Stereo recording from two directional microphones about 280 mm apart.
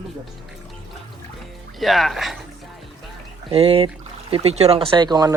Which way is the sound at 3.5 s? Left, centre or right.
Centre.